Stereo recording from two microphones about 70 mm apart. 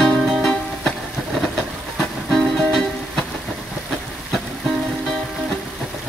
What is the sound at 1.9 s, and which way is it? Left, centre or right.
Music, centre.